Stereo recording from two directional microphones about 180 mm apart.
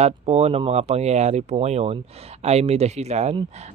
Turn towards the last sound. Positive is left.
turn(degrees=-40)  # may be behind; listen again after turning